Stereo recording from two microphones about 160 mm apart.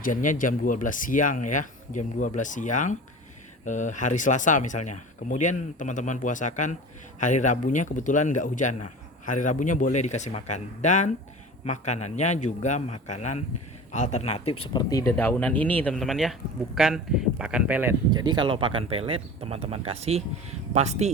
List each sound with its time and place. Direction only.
0.0 s a man's voice: 55° left (ahead or behind)
14.7 s speech: 25° left (ahead or behind)
15.2 s speech: 10° left (ahead or behind); by 17.9 s 10° right (ahead or behind)
18.1 s speech: 25° right (ahead or behind); by 21.1 s 45° right (ahead or behind)